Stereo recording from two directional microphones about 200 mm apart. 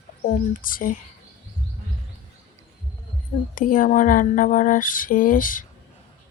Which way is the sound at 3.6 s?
45° left (ahead or behind).